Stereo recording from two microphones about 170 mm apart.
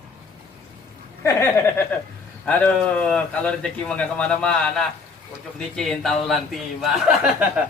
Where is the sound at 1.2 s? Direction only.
15° left (ahead or behind); by 6.5 s centre (ahead or behind).